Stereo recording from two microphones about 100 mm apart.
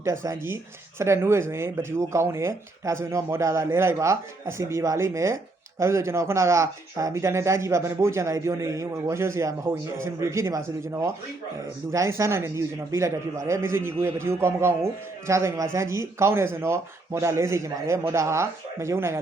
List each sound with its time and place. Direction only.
0.0 s speech: 25° right (ahead or behind)